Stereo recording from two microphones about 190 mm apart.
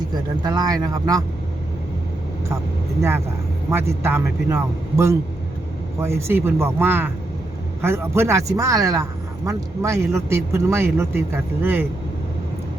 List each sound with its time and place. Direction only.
0.1 s speech: 20° right (ahead or behind)
3.0 s speech: 15° right (ahead or behind)